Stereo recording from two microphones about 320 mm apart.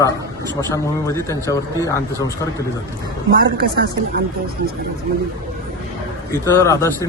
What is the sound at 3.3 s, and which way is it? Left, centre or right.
Speech, right.